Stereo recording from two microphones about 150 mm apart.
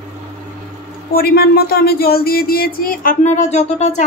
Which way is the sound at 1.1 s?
90° left.